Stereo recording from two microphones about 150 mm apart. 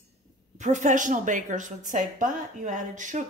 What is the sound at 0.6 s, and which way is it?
A woman's voice, 55° right (ahead or behind).